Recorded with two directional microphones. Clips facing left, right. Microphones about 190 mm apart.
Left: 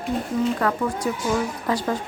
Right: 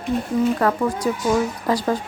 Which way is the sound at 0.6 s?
40° right (ahead or behind).